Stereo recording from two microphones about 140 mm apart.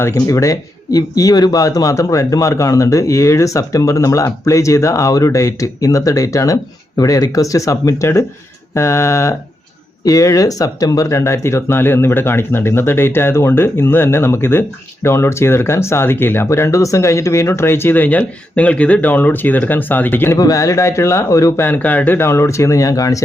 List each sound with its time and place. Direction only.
0.0 s speech: 20° left (ahead or behind)